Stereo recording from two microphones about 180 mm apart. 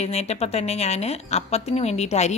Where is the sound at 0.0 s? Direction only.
35° left (ahead or behind).